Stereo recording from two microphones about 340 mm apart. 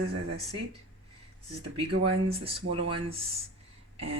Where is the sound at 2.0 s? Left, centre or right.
Centre.